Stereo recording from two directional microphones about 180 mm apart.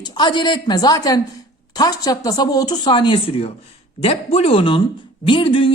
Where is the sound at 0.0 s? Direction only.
25° left (ahead or behind).